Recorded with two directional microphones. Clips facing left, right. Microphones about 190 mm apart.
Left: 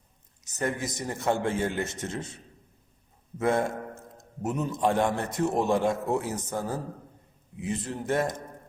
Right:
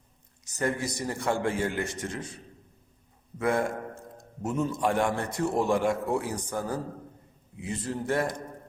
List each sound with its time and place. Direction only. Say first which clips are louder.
0.6 s a man's voice: right 1 dB; 20° left (ahead or behind)
3.3 s a man's voice: left 1 dB; 25° left (ahead or behind)